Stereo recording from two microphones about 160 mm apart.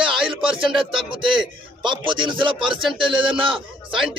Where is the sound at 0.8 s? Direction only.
30° right (ahead or behind).